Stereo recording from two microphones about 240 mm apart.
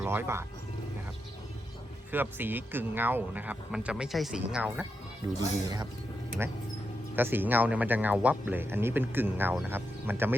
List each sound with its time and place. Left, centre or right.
0.0 s speech: centre
2.1 s speech: centre
5.4 s speech: centre
7.2 s speech: centre